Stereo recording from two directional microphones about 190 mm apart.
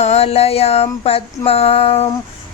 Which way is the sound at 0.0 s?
35° left (ahead or behind).